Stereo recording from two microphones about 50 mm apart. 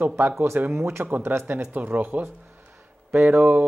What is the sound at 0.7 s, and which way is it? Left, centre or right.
Speech, right.